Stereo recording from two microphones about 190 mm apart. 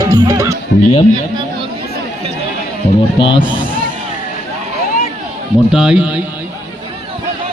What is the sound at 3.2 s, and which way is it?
Speech, 25° left (ahead or behind).